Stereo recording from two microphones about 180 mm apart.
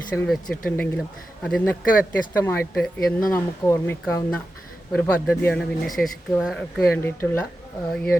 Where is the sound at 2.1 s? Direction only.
10° left (ahead or behind).